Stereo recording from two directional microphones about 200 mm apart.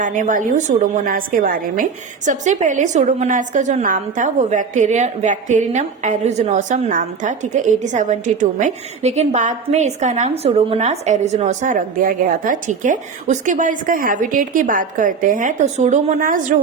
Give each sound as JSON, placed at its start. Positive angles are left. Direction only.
{"t": 0.0, "sound": "a woman's voice", "side_deg": -40}